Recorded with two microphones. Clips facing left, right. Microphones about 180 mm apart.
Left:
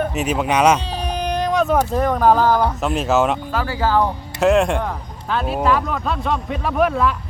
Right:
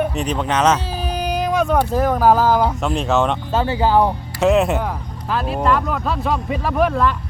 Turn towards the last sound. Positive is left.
turn(degrees=0)  # may be behind; listen again after turning